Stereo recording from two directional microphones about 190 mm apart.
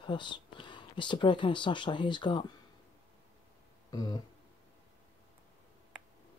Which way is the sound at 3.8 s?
20° left (ahead or behind).